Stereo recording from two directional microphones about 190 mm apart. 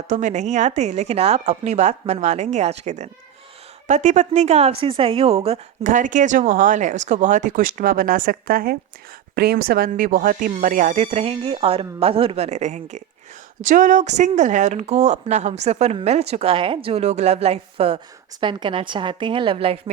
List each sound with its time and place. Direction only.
0.1 s a woman's voice: 40° right (ahead or behind)
5.9 s speech: 40° right (ahead or behind)